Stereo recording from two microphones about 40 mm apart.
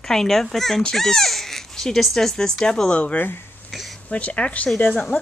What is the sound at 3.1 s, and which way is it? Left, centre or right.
Speech, left.